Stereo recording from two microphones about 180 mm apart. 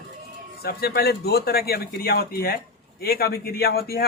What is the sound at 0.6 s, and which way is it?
Speech, 60° left (ahead or behind).